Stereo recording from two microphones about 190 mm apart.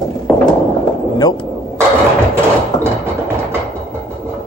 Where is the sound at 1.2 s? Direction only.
20° left (ahead or behind).